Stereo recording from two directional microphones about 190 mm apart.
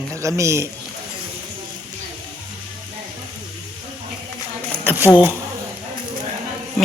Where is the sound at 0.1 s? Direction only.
15° right (ahead or behind).